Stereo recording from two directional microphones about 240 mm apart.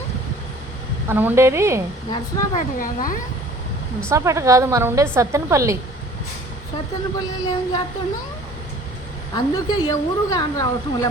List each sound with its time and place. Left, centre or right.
1.0 s a woman's voice: centre
2.0 s speech: centre
2.6 s speech: left
4.1 s a woman's voice: centre
7.2 s a woman's voice: centre
9.3 s a woman's voice: centre